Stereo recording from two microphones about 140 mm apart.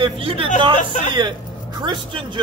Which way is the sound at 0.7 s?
65° left (ahead or behind).